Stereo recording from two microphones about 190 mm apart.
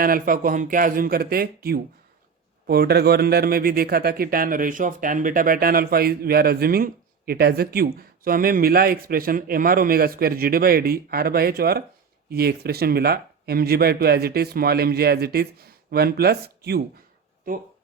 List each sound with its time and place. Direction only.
0.0 s a man's voice: 45° right (ahead or behind)